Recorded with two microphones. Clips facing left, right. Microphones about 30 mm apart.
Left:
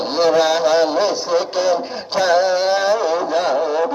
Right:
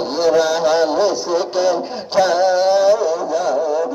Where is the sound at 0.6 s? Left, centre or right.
Centre.